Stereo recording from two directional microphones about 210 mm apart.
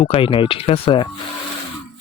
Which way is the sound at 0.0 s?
25° left (ahead or behind).